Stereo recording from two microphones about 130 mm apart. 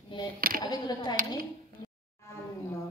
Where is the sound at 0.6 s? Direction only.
30° left (ahead or behind).